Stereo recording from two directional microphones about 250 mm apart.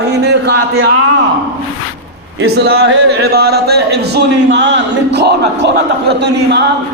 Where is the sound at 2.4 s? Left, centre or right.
Right.